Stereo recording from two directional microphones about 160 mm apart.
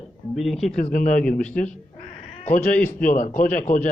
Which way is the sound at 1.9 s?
50° left (ahead or behind).